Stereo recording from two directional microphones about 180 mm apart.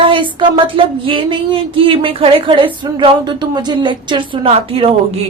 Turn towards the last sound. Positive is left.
turn(degrees=-35)  # may be behind; listen again after turning